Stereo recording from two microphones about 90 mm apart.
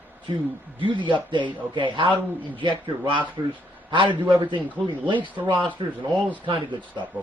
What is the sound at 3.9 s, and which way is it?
Speech, 60° right (ahead or behind).